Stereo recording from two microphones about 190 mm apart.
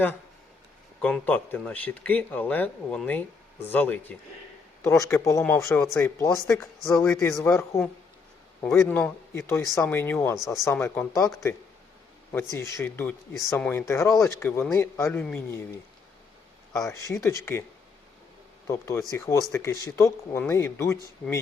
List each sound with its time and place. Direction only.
1.0 s speech: 10° left (ahead or behind)
12.3 s speech: 10° left (ahead or behind)
16.7 s speech: 15° left (ahead or behind)
18.7 s speech: 15° left (ahead or behind)